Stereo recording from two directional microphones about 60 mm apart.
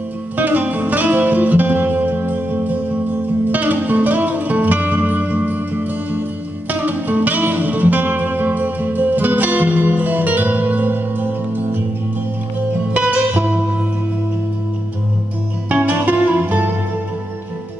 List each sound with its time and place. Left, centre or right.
0.4 s music: right
12.9 s music: right
15.7 s music: right